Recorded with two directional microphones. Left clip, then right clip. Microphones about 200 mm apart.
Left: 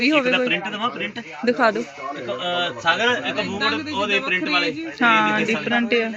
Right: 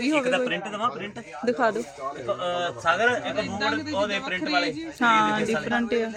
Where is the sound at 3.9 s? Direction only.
5° right (ahead or behind).